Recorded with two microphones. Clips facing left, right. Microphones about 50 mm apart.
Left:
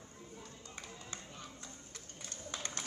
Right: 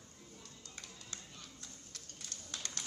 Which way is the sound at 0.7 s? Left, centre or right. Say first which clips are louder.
Left 3 dB; left.